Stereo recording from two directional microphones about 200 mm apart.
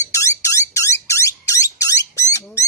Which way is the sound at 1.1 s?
15° left (ahead or behind).